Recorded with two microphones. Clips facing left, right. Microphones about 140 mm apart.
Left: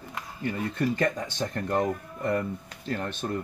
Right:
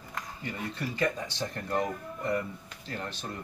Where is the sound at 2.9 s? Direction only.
50° left (ahead or behind).